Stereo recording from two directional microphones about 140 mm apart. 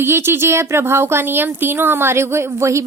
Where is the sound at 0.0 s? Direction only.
15° right (ahead or behind).